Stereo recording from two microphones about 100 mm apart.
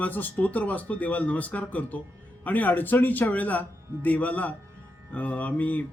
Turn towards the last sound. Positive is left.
turn(degrees=15)  # may be behind; listen again after turning